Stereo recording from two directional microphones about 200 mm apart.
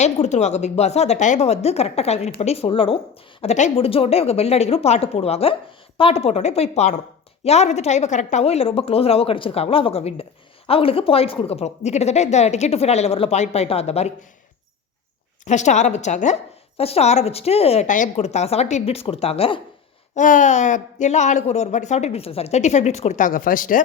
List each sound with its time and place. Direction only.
0.0 s a woman's voice: 35° left (ahead or behind)
15.4 s a woman's voice: 35° left (ahead or behind)
20.1 s a woman's voice: 40° left (ahead or behind)